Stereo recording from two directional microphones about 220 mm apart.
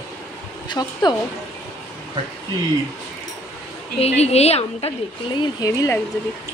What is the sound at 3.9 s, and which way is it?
Speech, 30° left (ahead or behind).